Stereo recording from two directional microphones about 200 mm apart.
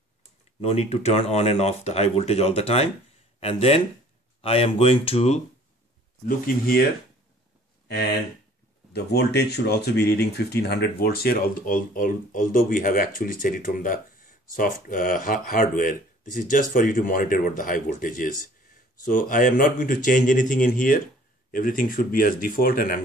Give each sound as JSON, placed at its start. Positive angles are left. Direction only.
{"t": 0.6, "sound": "speech", "side_deg": 30}
{"t": 6.2, "sound": "speech", "side_deg": 45}
{"t": 8.9, "sound": "speech", "side_deg": 55}